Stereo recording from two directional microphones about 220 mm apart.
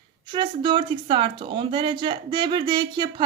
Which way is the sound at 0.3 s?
20° right (ahead or behind).